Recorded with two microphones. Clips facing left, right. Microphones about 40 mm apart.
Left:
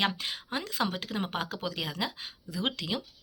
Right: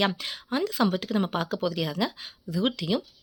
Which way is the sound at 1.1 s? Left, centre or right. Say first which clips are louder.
Right 6 dB; left.